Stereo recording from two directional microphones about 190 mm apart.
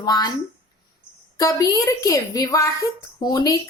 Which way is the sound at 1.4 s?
20° left (ahead or behind).